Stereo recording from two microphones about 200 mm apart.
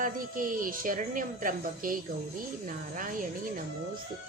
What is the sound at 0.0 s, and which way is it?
A woman's voice, 45° right (ahead or behind).